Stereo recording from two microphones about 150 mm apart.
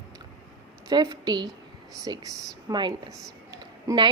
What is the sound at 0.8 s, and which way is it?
A woman's voice, 25° right (ahead or behind).